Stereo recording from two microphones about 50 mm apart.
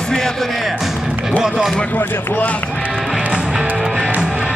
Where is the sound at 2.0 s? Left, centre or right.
Left.